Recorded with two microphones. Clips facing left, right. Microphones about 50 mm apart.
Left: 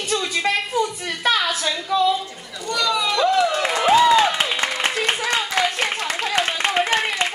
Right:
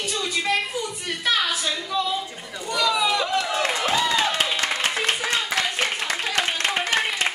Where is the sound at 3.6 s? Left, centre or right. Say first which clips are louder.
Left 7 dB; centre.